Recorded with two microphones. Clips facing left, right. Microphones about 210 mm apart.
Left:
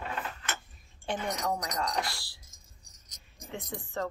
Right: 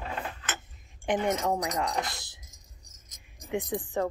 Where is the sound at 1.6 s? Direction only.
20° right (ahead or behind).